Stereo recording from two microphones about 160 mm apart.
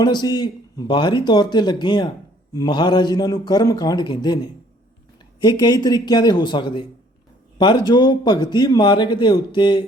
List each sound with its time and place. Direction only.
0.0 s a man's voice: 25° left (ahead or behind)
5.4 s a man's voice: 25° left (ahead or behind)